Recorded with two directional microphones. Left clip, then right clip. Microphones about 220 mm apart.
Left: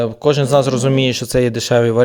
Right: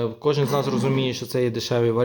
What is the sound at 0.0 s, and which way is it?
A man's voice, 40° left (ahead or behind).